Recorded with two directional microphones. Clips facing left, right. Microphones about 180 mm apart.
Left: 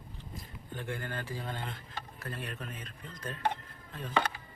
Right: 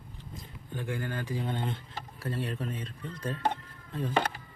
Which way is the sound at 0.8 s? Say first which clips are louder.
Right 4 dB; 10° right (ahead or behind).